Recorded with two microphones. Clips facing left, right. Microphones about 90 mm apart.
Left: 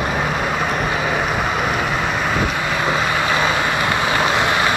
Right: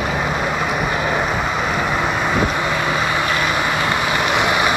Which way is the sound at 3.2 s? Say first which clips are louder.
Left 1 dB; 20° left (ahead or behind).